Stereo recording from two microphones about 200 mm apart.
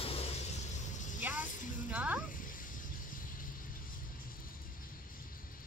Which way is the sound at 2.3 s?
45° left (ahead or behind).